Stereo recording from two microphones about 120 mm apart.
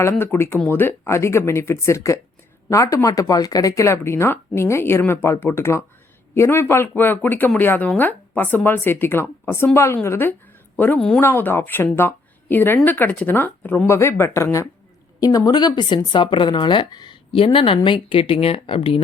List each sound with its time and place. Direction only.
0.0 s speech: 15° left (ahead or behind)
11.2 s speech: 15° left (ahead or behind)
13.8 s speech: 20° left (ahead or behind); by 19.0 s 50° left (ahead or behind)